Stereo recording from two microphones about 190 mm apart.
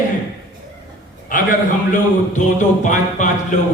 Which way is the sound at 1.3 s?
45° left (ahead or behind).